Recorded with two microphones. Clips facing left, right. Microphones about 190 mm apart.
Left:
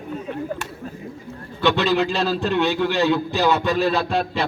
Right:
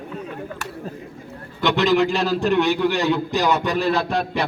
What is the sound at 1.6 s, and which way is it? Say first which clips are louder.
A man's voice: right 1 dB; 15° right (ahead or behind).